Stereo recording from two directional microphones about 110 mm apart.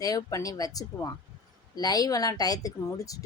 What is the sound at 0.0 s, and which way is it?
Speech, 35° left (ahead or behind).